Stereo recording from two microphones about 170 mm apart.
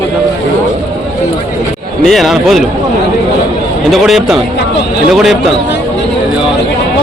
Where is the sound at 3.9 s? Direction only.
Centre (ahead or behind).